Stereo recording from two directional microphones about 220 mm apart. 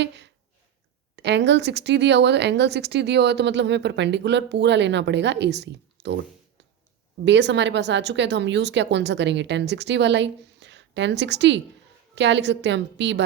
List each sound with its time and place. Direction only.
1.1 s speech: 50° right (ahead or behind)
7.3 s speech: 50° right (ahead or behind)